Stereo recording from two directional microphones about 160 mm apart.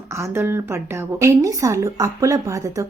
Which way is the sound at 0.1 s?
15° right (ahead or behind).